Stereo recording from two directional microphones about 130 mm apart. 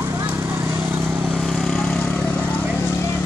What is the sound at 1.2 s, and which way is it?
Vehicle, 5° left (ahead or behind).